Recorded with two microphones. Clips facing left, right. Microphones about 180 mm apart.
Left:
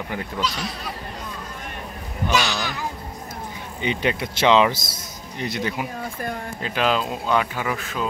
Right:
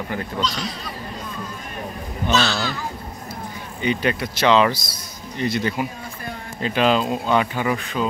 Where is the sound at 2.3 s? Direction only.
15° left (ahead or behind).